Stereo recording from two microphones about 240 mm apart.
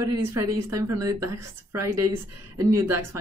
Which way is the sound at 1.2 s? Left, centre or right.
Right.